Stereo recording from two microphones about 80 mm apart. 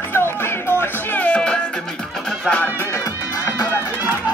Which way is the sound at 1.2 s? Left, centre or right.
Centre.